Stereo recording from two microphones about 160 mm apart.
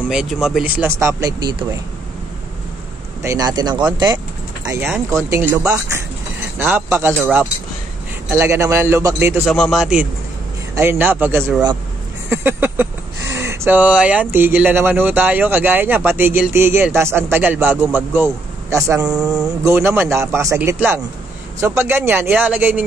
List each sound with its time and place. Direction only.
0.1 s speech: 5° right (ahead or behind)
0.8 s speech: 15° right (ahead or behind)
1.5 s speech: 30° right (ahead or behind)
3.2 s speech: 20° right (ahead or behind)
5.1 s speech: 15° right (ahead or behind)
8.3 s speech: 15° right (ahead or behind)
9.5 s speech: centre (ahead or behind)
10.7 s speech: 15° right (ahead or behind)
19.1 s speech: 5° right (ahead or behind)
19.6 s speech: 15° right (ahead or behind)